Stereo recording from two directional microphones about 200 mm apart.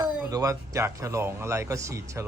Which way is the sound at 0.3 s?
15° right (ahead or behind).